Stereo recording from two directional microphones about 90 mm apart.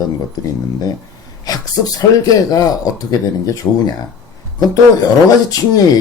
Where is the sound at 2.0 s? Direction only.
45° left (ahead or behind).